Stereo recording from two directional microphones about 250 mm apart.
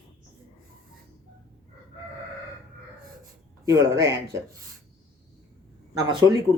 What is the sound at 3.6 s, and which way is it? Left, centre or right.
Speech, centre.